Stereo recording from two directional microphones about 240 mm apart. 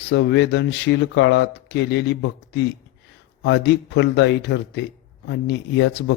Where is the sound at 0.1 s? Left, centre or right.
Left.